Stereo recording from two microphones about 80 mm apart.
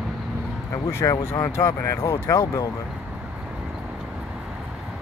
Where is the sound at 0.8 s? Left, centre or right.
Left.